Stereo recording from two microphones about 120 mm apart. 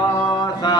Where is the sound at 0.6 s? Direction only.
40° left (ahead or behind).